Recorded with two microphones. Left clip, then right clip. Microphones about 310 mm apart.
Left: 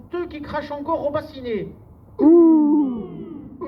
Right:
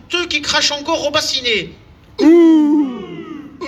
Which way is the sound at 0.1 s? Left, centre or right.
Right.